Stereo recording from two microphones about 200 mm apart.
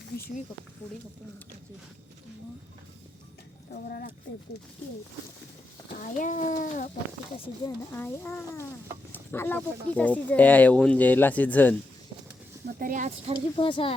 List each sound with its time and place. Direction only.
3.8 s speech: 50° left (ahead or behind)
6.0 s a child's voice: 40° left (ahead or behind)
7.9 s speech: 10° left (ahead or behind)
12.6 s speech: 45° right (ahead or behind)
13.6 s speech: 25° left (ahead or behind)